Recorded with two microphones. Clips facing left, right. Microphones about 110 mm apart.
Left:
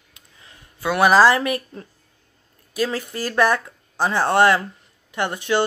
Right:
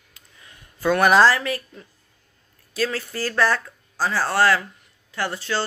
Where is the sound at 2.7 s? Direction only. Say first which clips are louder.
Left 2 dB; 15° left (ahead or behind).